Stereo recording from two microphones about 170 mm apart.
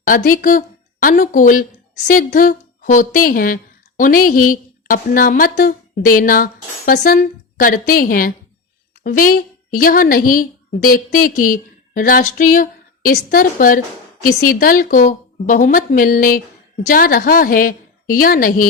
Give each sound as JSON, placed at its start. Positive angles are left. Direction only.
{"t": 0.3, "sound": "a woman's voice", "side_deg": 55}